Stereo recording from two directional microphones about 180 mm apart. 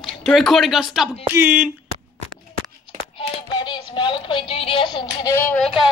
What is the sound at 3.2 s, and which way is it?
Music, 25° left (ahead or behind).